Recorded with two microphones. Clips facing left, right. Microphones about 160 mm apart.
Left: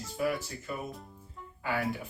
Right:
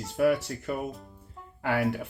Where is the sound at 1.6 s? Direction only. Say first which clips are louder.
Right 5 dB; 70° right (ahead or behind).